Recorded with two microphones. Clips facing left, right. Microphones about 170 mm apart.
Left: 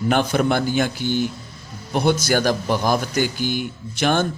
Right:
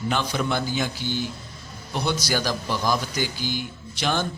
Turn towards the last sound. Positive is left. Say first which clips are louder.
# left 6 dB
turn(degrees=50)  # may be behind; listen again after turning